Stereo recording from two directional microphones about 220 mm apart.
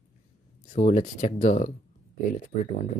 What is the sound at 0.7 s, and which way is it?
Speech, 35° left (ahead or behind).